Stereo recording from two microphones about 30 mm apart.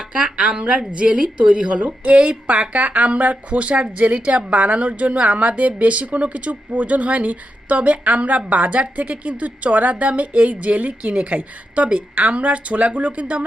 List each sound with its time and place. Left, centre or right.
0.0 s music: right
0.3 s a woman's voice: right
11.0 s a woman's voice: right
11.3 s a woman's voice: right